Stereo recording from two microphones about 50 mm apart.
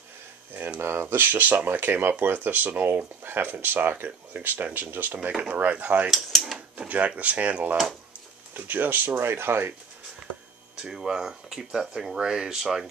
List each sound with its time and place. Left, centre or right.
0.7 s speech: right
1.0 s speech: right
5.5 s speech: right
6.1 s drawer open or close: centre
6.9 s speech: right
8.5 s speech: right
9.1 s speech: right
10.8 s speech: centre